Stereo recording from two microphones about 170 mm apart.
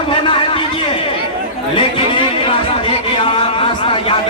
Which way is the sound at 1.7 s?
30° left (ahead or behind).